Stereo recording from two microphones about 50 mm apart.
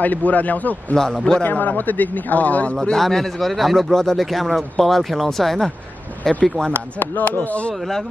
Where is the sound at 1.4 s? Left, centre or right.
Left.